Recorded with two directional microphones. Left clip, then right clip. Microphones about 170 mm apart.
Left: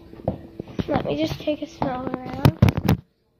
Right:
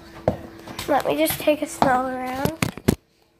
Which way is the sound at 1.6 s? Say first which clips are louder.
Right 7 dB; 40° right (ahead or behind).